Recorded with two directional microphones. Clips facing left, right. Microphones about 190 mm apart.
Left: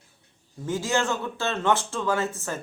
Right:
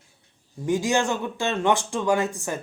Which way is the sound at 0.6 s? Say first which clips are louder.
Right 3 dB; 15° right (ahead or behind).